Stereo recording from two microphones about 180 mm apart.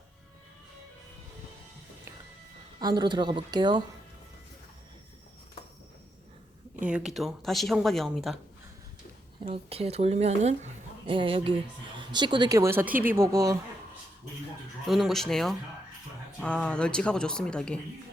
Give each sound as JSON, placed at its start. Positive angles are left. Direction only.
{"t": 2.7, "sound": "a woman's voice", "side_deg": -25}
{"t": 6.7, "sound": "speech", "side_deg": -5}
{"t": 9.4, "sound": "a woman's voice", "side_deg": -35}
{"t": 14.8, "sound": "speech", "side_deg": 0}